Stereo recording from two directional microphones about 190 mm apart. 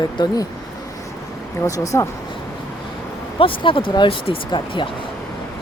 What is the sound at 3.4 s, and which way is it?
Speech, 25° left (ahead or behind).